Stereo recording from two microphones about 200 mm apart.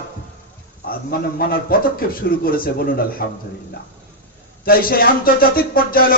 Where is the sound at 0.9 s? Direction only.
45° left (ahead or behind).